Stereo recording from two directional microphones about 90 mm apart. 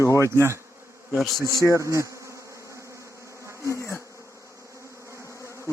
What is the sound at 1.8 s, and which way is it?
Bee, 35° right (ahead or behind).